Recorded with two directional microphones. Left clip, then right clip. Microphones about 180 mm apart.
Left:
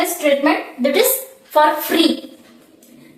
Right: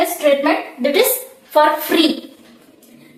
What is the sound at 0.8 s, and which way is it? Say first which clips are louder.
A woman's voice: even; 20° right (ahead or behind).